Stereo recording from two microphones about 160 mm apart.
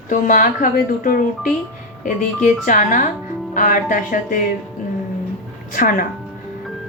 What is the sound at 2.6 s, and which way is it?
A woman's voice, 55° left (ahead or behind).